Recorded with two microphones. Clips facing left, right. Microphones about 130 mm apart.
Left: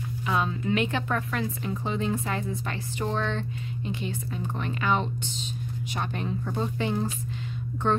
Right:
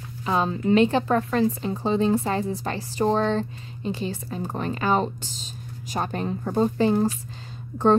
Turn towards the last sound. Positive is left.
turn(degrees=-35)  # may be behind; listen again after turning